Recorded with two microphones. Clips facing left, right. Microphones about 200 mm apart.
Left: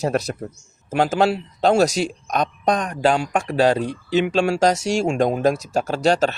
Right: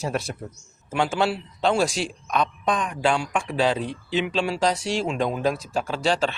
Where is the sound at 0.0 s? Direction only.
40° left (ahead or behind).